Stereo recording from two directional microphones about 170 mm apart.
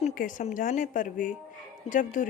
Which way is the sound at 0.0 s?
50° left (ahead or behind).